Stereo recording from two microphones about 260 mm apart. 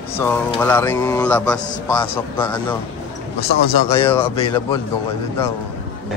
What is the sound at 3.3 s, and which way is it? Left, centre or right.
Speech, left.